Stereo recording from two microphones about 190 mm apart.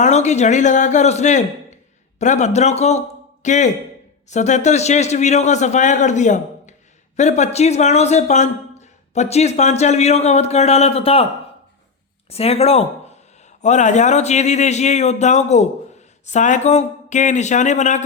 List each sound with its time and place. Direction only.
0.0 s a man's voice: 35° left (ahead or behind)
12.3 s speech: 30° left (ahead or behind)